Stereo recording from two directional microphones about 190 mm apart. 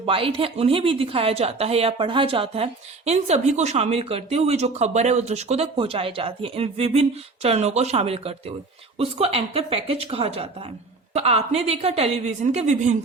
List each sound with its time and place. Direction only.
0.0 s speech: 30° right (ahead or behind)